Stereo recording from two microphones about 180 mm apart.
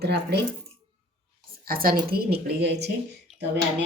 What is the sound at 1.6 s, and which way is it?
A woman's voice, 55° right (ahead or behind).